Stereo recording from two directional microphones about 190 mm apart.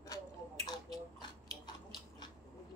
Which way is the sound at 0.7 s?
20° left (ahead or behind).